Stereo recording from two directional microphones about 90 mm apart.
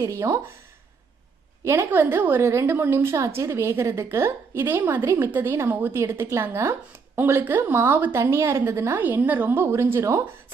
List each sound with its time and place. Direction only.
0.0 s speech: 35° right (ahead or behind)
1.6 s a woman's voice: 30° right (ahead or behind)